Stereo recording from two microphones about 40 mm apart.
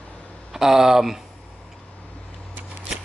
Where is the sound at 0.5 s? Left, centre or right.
Centre.